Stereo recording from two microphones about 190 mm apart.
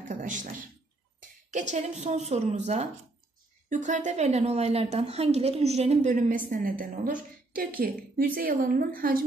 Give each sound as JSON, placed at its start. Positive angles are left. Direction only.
{"t": 0.1, "sound": "a man's voice", "side_deg": -40}